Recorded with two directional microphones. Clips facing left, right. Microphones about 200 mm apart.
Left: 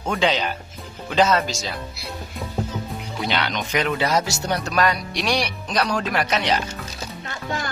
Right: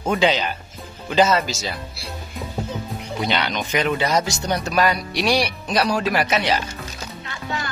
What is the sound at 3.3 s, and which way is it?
Speech, centre (ahead or behind).